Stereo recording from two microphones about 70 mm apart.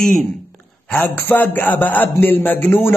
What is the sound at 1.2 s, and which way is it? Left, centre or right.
A man's voice, left.